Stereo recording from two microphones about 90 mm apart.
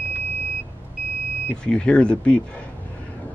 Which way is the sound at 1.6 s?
10° left (ahead or behind).